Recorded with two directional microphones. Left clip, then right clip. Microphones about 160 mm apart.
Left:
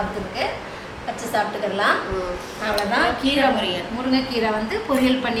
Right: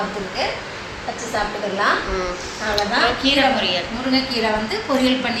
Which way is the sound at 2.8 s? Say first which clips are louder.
Right 2 dB; centre (ahead or behind).